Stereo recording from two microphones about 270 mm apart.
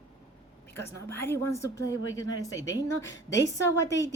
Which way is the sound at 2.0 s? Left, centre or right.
Left.